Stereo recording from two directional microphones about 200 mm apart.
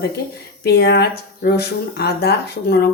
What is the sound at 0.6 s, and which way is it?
Speech, 55° left (ahead or behind).